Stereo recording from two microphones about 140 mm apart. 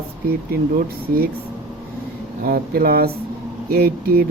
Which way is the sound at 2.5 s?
90° right.